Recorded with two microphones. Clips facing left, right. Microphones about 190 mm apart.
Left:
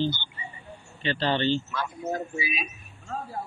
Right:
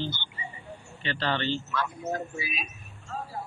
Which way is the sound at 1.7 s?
5° left (ahead or behind).